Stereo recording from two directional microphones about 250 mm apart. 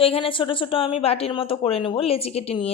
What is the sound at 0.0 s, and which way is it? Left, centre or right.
Speech, left.